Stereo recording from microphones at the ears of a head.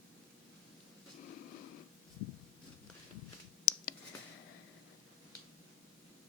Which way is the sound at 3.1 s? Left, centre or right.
Left.